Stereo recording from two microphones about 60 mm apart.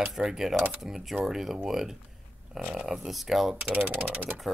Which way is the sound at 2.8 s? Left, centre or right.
Centre.